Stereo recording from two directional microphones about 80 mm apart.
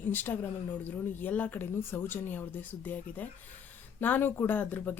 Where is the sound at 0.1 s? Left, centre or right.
Left.